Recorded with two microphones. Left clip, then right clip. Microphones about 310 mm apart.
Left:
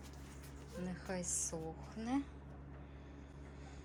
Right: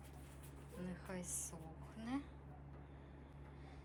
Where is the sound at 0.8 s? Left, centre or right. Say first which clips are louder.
Left 7 dB; centre.